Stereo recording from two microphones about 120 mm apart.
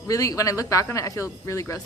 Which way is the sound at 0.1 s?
30° left (ahead or behind).